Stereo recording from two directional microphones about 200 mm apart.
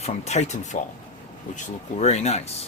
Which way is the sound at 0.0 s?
35° left (ahead or behind).